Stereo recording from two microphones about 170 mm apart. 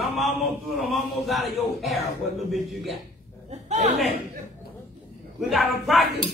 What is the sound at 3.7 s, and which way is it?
Speech, 45° right (ahead or behind).